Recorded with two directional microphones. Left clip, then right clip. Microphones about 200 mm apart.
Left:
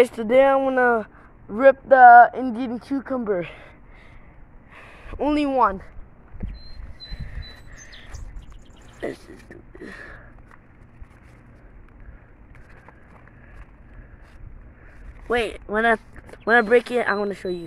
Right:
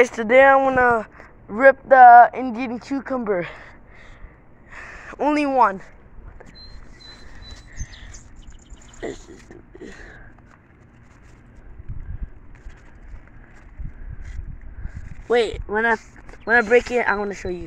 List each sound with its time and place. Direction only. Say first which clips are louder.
0.0 s speech: right 3 dB; 5° left (ahead or behind); by 1.0 s 20° left (ahead or behind)
1.5 s speech: right 2 dB; 5° left (ahead or behind)
5.3 s speech: right 2 dB; centre (ahead or behind)
9.0 s a sound: left 1 dB; 15° left (ahead or behind)
15.2 s speech: right 4 dB; 5° left (ahead or behind)
15.7 s speech: left 3 dB; 25° left (ahead or behind)